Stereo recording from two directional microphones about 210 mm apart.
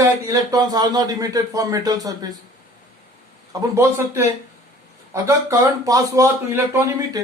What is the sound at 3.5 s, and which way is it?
Speech, 15° right (ahead or behind).